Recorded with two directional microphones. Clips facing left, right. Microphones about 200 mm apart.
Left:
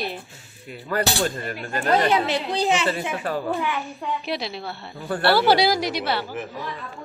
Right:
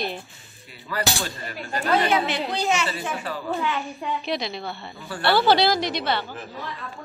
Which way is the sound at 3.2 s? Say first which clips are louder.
Left 5 dB; 50° left (ahead or behind).